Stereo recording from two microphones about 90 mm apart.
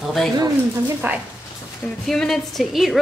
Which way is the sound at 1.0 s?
20° right (ahead or behind).